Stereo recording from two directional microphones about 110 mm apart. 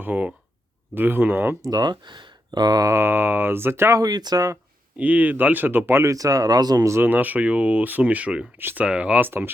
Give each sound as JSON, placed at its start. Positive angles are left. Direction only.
{"t": 0.0, "sound": "speech", "side_deg": -15}
{"t": 1.6, "sound": "speech", "side_deg": -35}
{"t": 4.9, "sound": "speech", "side_deg": -15}